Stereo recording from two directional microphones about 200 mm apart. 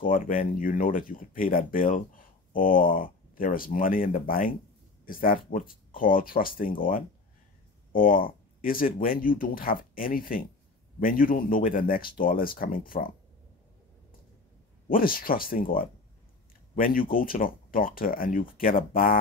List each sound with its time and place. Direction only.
0.0 s speech: 45° left (ahead or behind)
14.9 s speech: 45° left (ahead or behind)